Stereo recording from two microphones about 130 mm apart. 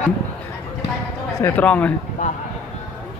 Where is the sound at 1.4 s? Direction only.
15° left (ahead or behind).